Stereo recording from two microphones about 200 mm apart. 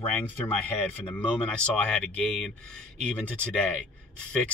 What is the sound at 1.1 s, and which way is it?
Speech, 5° left (ahead or behind).